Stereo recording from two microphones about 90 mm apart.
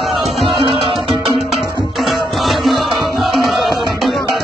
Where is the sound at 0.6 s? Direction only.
90° right.